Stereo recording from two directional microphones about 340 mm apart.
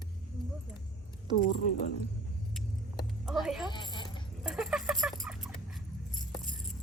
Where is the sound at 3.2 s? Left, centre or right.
Centre.